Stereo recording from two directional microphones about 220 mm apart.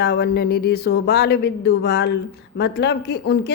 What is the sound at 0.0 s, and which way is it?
A woman's voice, 45° left (ahead or behind).